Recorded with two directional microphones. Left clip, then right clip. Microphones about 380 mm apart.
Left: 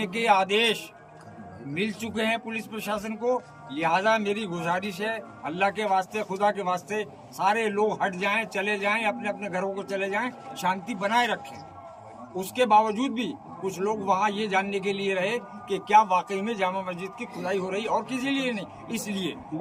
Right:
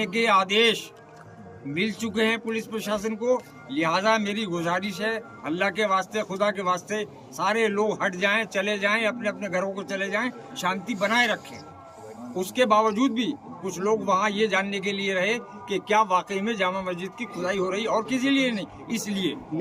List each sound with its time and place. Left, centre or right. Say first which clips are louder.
0.0 s a man's voice: right 1 dB; centre
12.4 s a man's voice: even; centre